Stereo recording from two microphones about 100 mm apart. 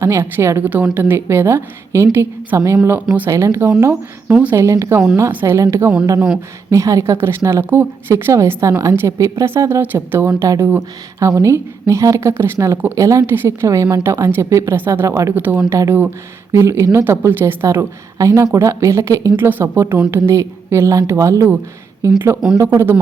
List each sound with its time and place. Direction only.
0.0 s a woman's voice: 25° right (ahead or behind)
6.1 s a woman's voice: 5° right (ahead or behind)
6.7 s a woman's voice: 30° right (ahead or behind)
15.4 s a woman's voice: 15° right (ahead or behind)
19.4 s a woman's voice: 20° right (ahead or behind)